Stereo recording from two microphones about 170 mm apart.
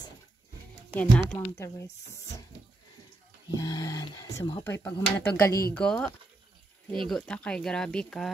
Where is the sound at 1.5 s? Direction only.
15° left (ahead or behind).